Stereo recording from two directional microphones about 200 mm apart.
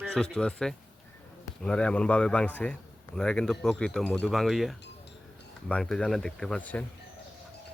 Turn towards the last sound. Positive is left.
turn(degrees=5)  # may be behind; listen again after turning